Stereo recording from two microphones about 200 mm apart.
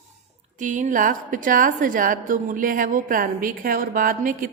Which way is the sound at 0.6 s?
40° right (ahead or behind).